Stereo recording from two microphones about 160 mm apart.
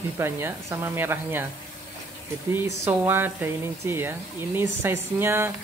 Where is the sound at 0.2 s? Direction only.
15° right (ahead or behind).